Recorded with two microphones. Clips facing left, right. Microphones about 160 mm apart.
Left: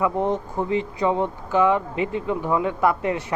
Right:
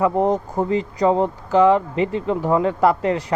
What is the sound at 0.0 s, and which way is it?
Speech, 40° right (ahead or behind).